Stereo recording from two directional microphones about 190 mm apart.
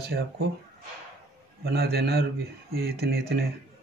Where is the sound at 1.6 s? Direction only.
55° right (ahead or behind).